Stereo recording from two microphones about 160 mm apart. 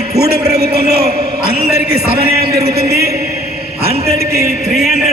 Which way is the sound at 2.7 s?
80° right.